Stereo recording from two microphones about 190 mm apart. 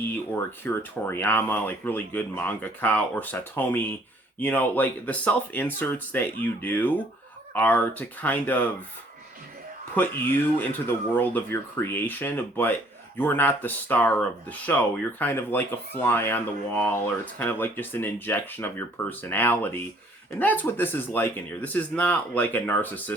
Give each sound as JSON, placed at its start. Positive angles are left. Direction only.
{"t": 0.6, "sound": "speech", "side_deg": 10}
{"t": 9.9, "sound": "speech", "side_deg": 10}